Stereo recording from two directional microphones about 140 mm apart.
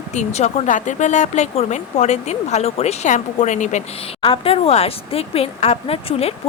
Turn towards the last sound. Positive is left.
turn(degrees=45)  # may be behind; listen again after turning